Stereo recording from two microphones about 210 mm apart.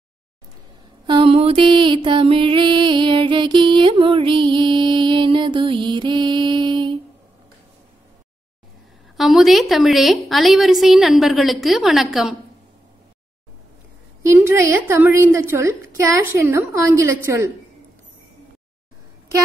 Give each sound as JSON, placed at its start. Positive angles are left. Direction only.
{"t": 1.0, "sound": "mantra", "side_deg": -25}
{"t": 9.1, "sound": "a woman's voice", "side_deg": 0}
{"t": 14.3, "sound": "a woman's voice", "side_deg": -15}